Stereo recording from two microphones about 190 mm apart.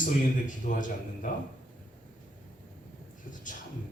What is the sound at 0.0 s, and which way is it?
A man's voice, 40° left (ahead or behind).